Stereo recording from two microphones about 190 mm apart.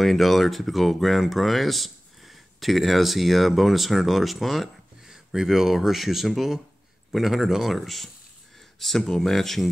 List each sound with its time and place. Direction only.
0.0 s speech: centre (ahead or behind)